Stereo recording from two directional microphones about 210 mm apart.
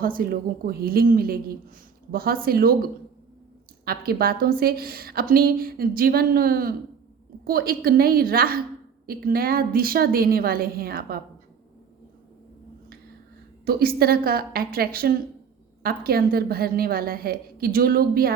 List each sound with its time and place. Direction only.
0.0 s a woman's voice: 45° right (ahead or behind)
13.7 s a woman's voice: 45° right (ahead or behind)